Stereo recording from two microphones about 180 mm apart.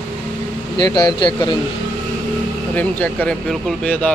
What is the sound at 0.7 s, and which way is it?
Speech, 20° left (ahead or behind).